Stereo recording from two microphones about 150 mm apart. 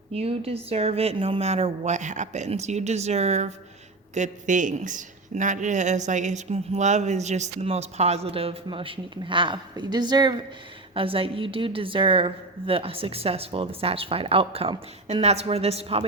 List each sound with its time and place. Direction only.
0.1 s a woman's voice: 40° right (ahead or behind)